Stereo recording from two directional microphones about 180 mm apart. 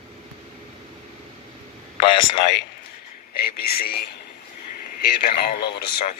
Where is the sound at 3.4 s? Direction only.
60° left (ahead or behind).